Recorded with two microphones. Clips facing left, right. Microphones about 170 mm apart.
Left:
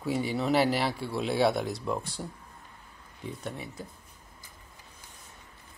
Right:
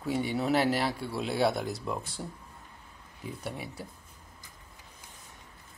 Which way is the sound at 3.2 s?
10° right (ahead or behind).